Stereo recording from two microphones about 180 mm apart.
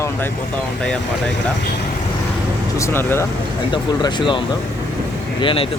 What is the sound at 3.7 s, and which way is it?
Speech, 25° left (ahead or behind).